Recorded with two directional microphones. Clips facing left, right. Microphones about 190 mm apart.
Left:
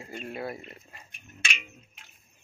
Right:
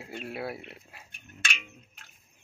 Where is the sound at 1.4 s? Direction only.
5° left (ahead or behind).